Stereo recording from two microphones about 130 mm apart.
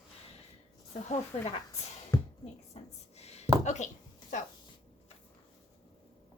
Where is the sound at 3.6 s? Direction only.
65° left (ahead or behind).